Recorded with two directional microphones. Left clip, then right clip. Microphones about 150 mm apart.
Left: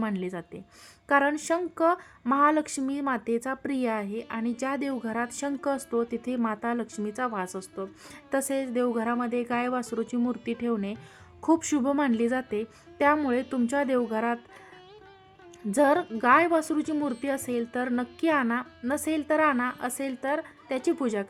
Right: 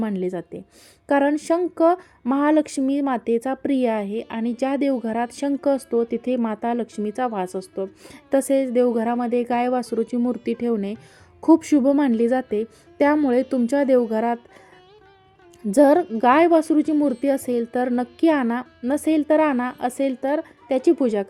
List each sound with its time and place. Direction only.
0.0 s a woman's voice: 25° right (ahead or behind)
9.8 s speech: centre (ahead or behind)
10.3 s a woman's voice: 25° right (ahead or behind)
15.7 s a woman's voice: 30° right (ahead or behind)